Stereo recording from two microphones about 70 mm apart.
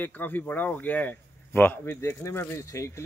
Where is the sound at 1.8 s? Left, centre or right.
Left.